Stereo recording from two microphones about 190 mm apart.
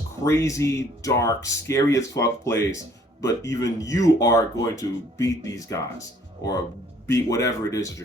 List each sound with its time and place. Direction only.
0.3 s speech: 15° left (ahead or behind)
7.1 s speech: 15° left (ahead or behind)